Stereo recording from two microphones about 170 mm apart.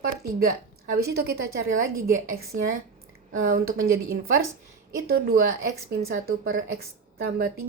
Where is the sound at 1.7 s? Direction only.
60° right (ahead or behind).